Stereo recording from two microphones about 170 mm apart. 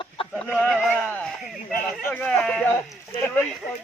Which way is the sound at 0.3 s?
5° left (ahead or behind).